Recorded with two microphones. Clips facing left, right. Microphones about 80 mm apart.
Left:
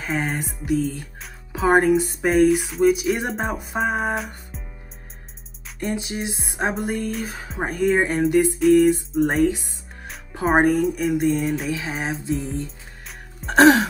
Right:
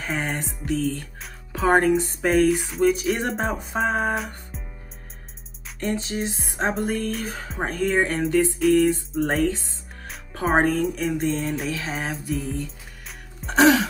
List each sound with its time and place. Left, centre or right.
0.0 s speech: centre
5.8 s a woman's voice: centre
8.5 s speech: centre
9.4 s a woman's voice: centre
11.8 s music: centre
13.6 s a sound: left